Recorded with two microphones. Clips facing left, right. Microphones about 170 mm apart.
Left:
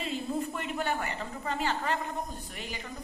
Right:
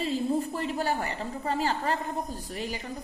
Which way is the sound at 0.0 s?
35° right (ahead or behind).